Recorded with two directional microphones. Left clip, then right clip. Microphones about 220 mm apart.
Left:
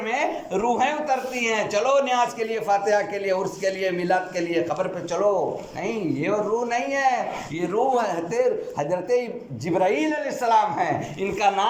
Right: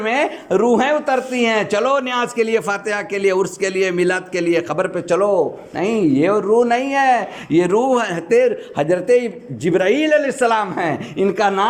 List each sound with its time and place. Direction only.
0.0 s speech: 40° right (ahead or behind)